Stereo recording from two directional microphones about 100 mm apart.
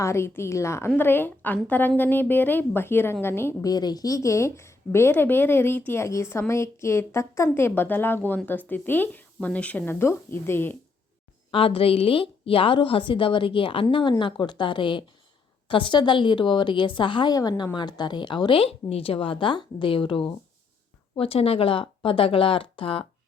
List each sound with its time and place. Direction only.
0.0 s a woman's voice: 25° left (ahead or behind)
3.6 s a woman's voice: 40° left (ahead or behind); by 10.8 s 25° left (ahead or behind)
11.5 s a woman's voice: 65° left (ahead or behind)
13.9 s a woman's voice: 55° left (ahead or behind)
21.2 s a woman's voice: 80° left; by 23.0 s 65° left (ahead or behind)